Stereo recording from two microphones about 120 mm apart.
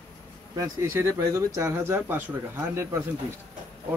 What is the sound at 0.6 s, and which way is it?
Speech, 25° right (ahead or behind).